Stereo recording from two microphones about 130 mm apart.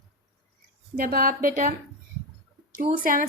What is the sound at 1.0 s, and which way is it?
Speech, 90° right.